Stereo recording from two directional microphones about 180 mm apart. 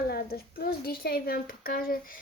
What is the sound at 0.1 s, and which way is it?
A woman's voice, 60° left (ahead or behind).